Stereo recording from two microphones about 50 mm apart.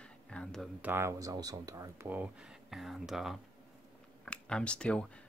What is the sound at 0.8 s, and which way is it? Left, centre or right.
Speech, right.